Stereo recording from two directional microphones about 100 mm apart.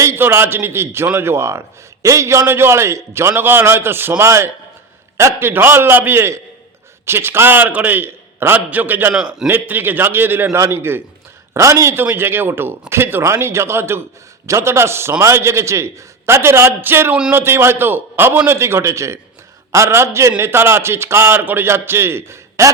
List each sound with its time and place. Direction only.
0.0 s a man's voice: 25° right (ahead or behind)
9.1 s a man's voice: 5° right (ahead or behind)
9.5 s a man's voice: 20° right (ahead or behind)